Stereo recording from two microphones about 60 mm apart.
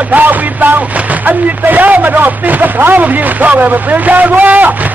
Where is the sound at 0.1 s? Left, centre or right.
Right.